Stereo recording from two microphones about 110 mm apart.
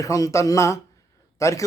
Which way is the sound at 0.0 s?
30° left (ahead or behind).